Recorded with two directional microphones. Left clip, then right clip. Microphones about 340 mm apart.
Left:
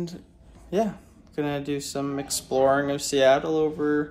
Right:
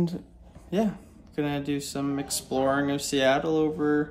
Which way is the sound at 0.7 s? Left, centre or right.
Centre.